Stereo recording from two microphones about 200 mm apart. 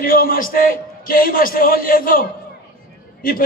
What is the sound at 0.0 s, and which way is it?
A man's voice, 45° left (ahead or behind).